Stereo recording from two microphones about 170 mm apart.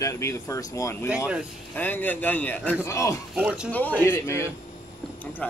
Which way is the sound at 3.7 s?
10° left (ahead or behind).